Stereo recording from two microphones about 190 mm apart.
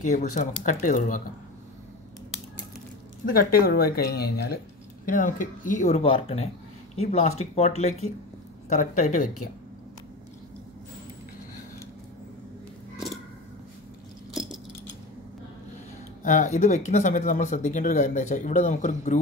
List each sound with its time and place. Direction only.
0.1 s speech: 40° left (ahead or behind)
3.3 s speech: 50° left (ahead or behind)
5.0 s speech: 45° left (ahead or behind)
8.6 s speech: 40° left (ahead or behind)
14.3 s keys jangling: centre (ahead or behind)
16.3 s speech: 40° left (ahead or behind)